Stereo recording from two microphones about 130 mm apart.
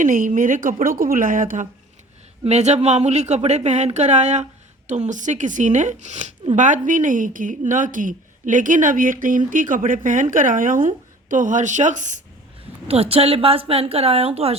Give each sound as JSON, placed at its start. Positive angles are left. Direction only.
{"t": 0.0, "sound": "speech", "side_deg": -90}
{"t": 2.4, "sound": "speech", "side_deg": -60}
{"t": 12.9, "sound": "speech", "side_deg": -50}